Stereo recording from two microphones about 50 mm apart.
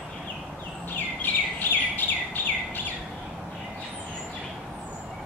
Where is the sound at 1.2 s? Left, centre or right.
Left.